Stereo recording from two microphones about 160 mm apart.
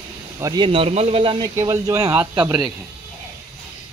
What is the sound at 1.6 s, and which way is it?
Speech, 20° right (ahead or behind).